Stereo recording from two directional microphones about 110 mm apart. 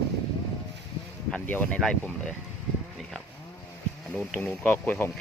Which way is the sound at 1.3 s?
15° left (ahead or behind).